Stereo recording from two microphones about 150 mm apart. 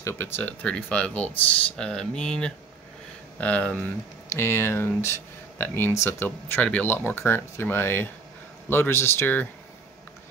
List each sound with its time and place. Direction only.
0.0 s speech: 10° left (ahead or behind)